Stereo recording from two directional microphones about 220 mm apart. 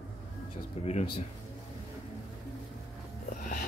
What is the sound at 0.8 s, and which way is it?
Speech, 30° left (ahead or behind).